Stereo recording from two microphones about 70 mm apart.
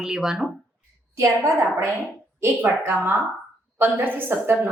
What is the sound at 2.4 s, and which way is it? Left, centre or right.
A woman's voice, right.